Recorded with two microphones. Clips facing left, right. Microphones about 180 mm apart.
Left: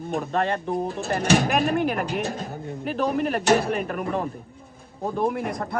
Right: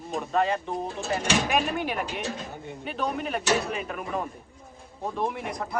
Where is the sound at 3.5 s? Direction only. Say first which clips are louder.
Left 6 dB; 60° left (ahead or behind).